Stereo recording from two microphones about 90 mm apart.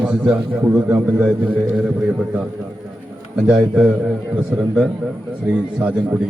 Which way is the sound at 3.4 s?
15° right (ahead or behind).